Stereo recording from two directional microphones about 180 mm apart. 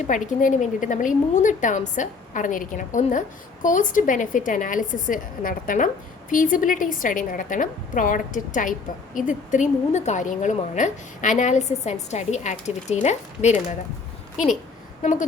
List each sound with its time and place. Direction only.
0.0 s a woman's voice: 45° left (ahead or behind)
15.0 s a woman's voice: 45° left (ahead or behind)